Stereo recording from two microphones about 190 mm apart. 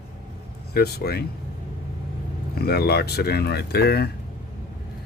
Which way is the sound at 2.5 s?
55° left (ahead or behind).